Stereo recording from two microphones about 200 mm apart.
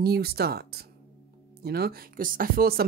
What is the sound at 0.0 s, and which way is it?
Speech, 50° right (ahead or behind).